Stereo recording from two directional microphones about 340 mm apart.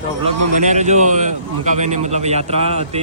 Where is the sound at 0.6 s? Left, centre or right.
Right.